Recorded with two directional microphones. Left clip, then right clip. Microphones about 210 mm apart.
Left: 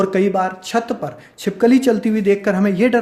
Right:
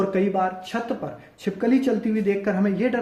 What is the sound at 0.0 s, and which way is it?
Speech, 45° left (ahead or behind).